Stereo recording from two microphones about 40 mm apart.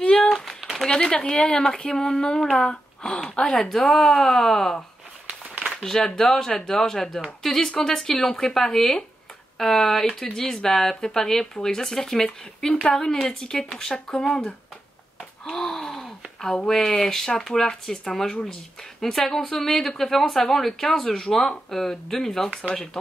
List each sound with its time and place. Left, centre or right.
0.0 s a sound: left
0.8 s speech: left
3.6 s speech: centre
5.8 s speech: centre
15.4 s gasp: centre
16.6 s speech: centre